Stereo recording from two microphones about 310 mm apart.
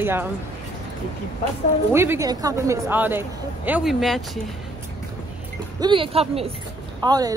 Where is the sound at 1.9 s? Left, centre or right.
Centre.